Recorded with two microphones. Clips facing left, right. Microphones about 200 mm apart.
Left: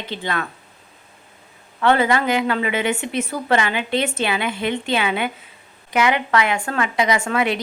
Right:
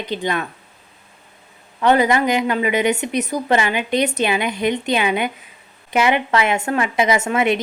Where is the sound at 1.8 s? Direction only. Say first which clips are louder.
Right 2 dB; 15° right (ahead or behind).